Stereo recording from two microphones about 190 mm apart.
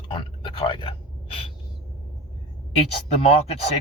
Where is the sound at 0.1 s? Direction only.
25° left (ahead or behind).